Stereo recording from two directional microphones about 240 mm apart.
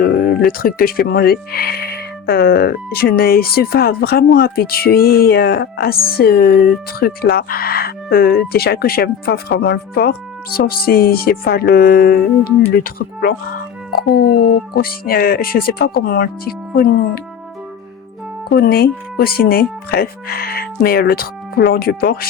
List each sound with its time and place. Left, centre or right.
0.0 s speech: left
18.4 s speech: left